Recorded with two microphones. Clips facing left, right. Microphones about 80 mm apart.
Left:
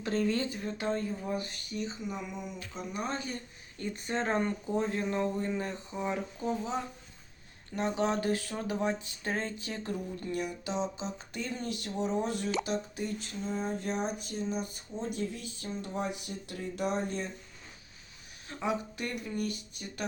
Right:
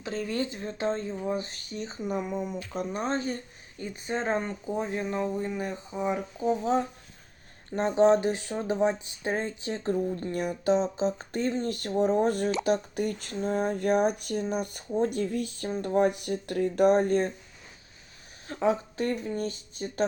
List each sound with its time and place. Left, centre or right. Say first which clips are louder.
0.0 s speech: left 2 dB; centre
0.5 s speech: right 3 dB; right
3.0 s speech: right 5 dB; right
3.8 s speech: right 2 dB; centre
7.7 s speech: right 9 dB; right
18.4 s speech: right 7 dB; right